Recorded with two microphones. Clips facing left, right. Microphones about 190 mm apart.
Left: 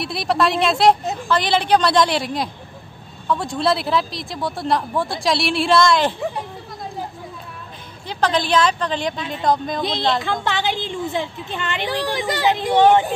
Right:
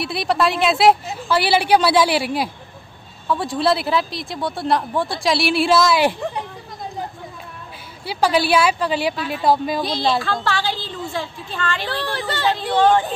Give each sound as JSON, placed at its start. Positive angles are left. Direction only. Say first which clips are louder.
{"t": 0.0, "sound": "a woman's voice", "louder": "even", "side_deg": 0}
{"t": 8.1, "sound": "a woman's voice", "louder": "right 2 dB", "side_deg": -10}
{"t": 9.8, "sound": "speech", "louder": "left 2 dB", "side_deg": 20}